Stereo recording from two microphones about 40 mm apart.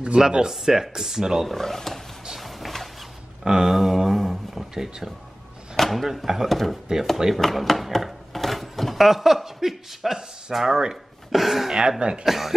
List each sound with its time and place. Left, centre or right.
0.0 s speech: right
1.5 s speech: centre
2.2 s a sound: centre
3.4 s speech: centre
3.7 s a sound: centre
5.8 s speech: centre; by 12.3 s right
12.3 s speech: centre